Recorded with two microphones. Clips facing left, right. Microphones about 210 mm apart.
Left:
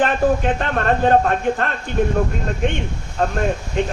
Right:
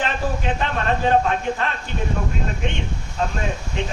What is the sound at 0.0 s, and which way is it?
A man's voice, 50° left (ahead or behind).